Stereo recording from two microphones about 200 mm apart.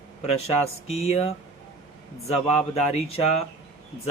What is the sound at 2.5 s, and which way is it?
Speech, 35° left (ahead or behind).